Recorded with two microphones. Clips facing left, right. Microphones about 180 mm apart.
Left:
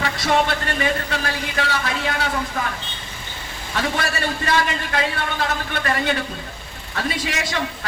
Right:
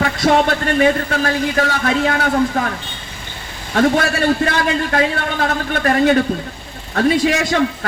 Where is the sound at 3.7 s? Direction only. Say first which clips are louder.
Right 9 dB; 50° right (ahead or behind).